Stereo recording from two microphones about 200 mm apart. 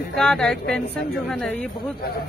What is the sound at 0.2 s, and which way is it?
Speech, 5° left (ahead or behind).